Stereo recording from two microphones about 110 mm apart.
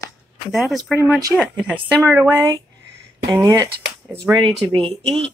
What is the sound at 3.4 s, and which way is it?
Speech, 30° right (ahead or behind).